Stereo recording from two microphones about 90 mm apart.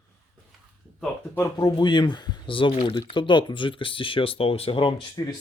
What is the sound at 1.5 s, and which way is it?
Speech, 60° left (ahead or behind).